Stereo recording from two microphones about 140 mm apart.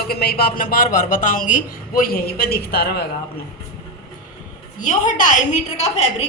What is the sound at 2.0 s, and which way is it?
Speech, 90° left.